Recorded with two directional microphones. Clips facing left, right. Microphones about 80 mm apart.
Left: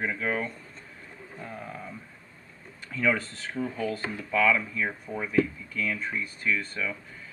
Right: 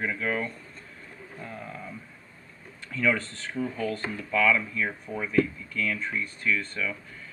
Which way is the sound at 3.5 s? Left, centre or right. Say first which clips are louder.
Right 1 dB; left.